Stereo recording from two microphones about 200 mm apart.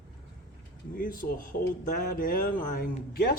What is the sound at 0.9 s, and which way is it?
Speech, 45° left (ahead or behind).